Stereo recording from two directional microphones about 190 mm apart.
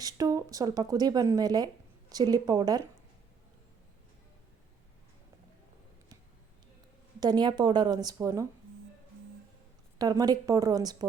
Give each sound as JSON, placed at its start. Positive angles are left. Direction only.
{"t": 0.0, "sound": "speech", "side_deg": -20}
{"t": 7.2, "sound": "speech", "side_deg": -20}
{"t": 10.0, "sound": "speech", "side_deg": -20}